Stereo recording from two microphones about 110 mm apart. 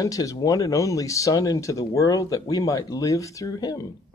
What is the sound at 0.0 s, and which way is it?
Speech, 30° left (ahead or behind).